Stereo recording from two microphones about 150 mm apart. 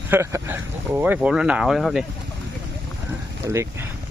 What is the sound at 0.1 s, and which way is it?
Speech, 20° right (ahead or behind).